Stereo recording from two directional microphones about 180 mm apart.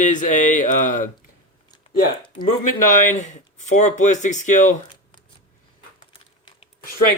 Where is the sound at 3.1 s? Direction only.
45° left (ahead or behind).